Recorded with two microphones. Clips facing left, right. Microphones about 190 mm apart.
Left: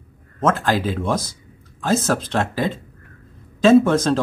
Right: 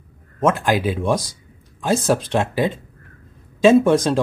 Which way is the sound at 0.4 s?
15° right (ahead or behind).